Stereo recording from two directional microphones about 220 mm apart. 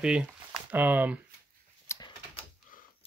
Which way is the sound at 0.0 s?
5° right (ahead or behind).